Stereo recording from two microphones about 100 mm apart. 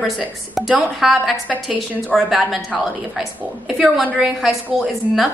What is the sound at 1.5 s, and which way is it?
Speech, 15° right (ahead or behind).